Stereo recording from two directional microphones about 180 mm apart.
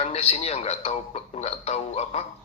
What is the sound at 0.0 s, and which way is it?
Speech, 35° left (ahead or behind).